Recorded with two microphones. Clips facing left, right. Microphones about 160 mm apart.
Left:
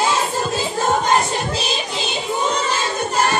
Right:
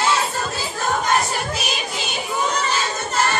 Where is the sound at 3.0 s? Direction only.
15° left (ahead or behind).